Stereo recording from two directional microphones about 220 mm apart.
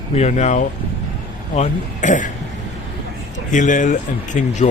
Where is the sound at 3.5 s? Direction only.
35° left (ahead or behind).